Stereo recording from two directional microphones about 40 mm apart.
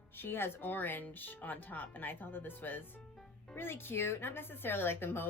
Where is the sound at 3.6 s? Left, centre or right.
Left.